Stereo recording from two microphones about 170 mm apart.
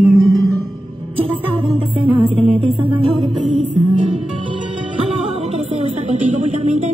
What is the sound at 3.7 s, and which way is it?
Music, 30° right (ahead or behind).